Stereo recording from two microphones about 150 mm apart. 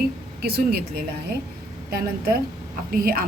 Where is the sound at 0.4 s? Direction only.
90° right.